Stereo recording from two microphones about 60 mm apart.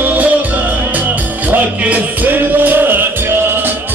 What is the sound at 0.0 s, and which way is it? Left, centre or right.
Music, right.